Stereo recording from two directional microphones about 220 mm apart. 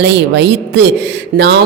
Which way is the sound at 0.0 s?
50° right (ahead or behind).